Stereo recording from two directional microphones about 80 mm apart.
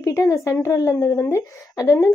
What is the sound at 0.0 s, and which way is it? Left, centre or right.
Speech, left.